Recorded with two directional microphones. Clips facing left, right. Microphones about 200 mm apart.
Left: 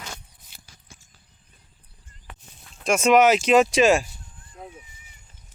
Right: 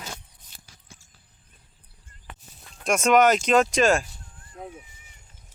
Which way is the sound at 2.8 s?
Centre (ahead or behind).